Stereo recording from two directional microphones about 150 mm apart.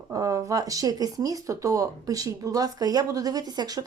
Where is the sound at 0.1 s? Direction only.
20° right (ahead or behind).